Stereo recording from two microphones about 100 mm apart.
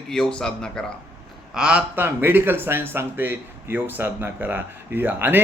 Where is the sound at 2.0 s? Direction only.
20° right (ahead or behind).